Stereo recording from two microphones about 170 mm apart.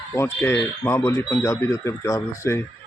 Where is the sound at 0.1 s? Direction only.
10° left (ahead or behind).